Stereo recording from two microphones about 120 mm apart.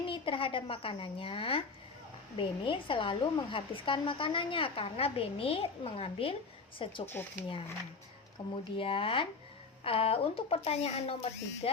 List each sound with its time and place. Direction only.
0.1 s a woman's voice: 45° left (ahead or behind)
8.4 s speech: 35° left (ahead or behind)
8.8 s a woman's voice: 45° left (ahead or behind)